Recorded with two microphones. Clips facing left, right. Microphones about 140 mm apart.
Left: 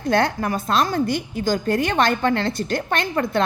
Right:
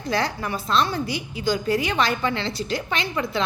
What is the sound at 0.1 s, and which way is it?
A woman's voice, 55° left (ahead or behind).